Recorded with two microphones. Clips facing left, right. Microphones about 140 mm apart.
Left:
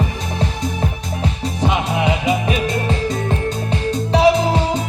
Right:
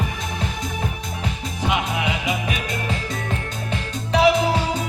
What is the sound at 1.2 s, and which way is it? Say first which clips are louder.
Music: left 6 dB; 30° left (ahead or behind).